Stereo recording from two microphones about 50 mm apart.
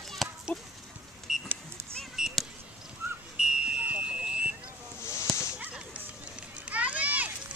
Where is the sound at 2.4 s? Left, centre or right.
Centre.